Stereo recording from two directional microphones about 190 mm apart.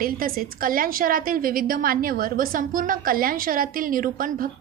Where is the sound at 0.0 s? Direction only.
50° right (ahead or behind).